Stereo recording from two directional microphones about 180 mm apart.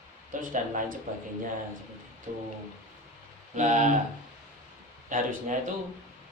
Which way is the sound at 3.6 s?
40° right (ahead or behind).